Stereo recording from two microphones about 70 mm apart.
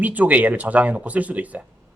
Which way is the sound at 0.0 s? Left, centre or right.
Right.